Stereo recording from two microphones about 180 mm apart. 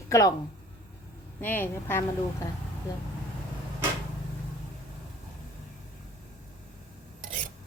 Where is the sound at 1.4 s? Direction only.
10° left (ahead or behind).